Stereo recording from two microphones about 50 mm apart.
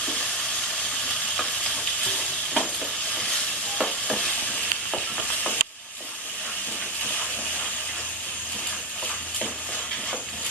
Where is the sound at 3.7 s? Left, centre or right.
Centre.